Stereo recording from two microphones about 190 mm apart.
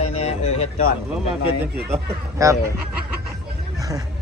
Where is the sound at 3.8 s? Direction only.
20° right (ahead or behind).